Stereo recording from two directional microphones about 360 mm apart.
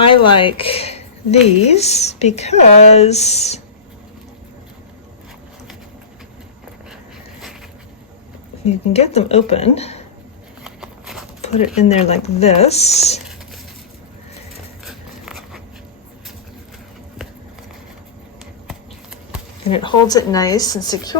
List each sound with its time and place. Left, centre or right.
0.3 s speech: centre
8.6 s speech: centre
10.6 s a sound: centre
11.4 s speech: centre
14.8 s a sound: centre
19.7 s speech: centre